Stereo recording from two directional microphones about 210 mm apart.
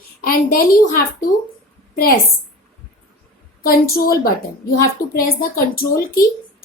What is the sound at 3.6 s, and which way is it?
A woman's voice, 45° left (ahead or behind).